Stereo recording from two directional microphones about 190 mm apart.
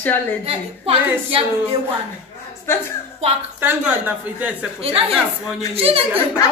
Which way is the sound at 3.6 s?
5° right (ahead or behind).